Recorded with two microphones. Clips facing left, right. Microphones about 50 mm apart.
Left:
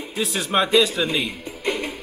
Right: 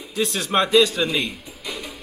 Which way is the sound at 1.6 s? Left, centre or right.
Left.